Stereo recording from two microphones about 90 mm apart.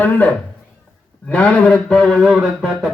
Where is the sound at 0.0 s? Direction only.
20° left (ahead or behind).